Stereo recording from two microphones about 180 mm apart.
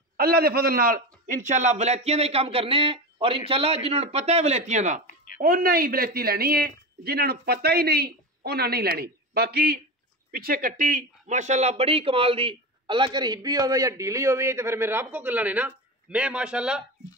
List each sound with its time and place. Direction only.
0.2 s a man's voice: 60° right (ahead or behind); by 5.0 s 40° right (ahead or behind)
5.0 s a sound: 50° left (ahead or behind)
5.4 s speech: 55° right (ahead or behind); by 16.8 s 5° right (ahead or behind)